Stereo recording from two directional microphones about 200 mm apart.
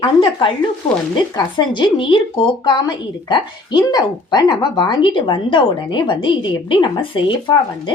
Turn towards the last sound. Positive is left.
turn(degrees=20)  # may be behind; listen again after turning